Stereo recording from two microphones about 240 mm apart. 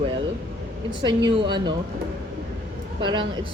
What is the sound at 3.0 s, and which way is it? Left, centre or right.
Speech, centre.